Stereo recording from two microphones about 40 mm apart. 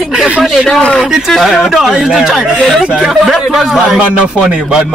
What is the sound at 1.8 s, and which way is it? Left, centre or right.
Speech, centre.